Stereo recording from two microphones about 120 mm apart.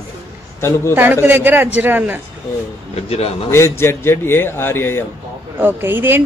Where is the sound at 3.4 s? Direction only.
20° left (ahead or behind).